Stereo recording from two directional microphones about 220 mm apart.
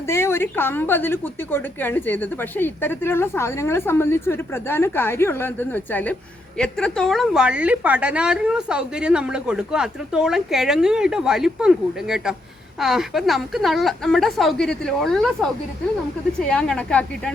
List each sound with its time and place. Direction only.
0.1 s a woman's voice: 10° left (ahead or behind)
16.5 s a woman's voice: 5° left (ahead or behind)